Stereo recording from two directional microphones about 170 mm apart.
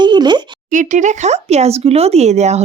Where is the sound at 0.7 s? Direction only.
45° right (ahead or behind).